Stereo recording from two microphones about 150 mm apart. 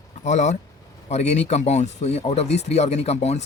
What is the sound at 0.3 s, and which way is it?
Speech, 50° left (ahead or behind).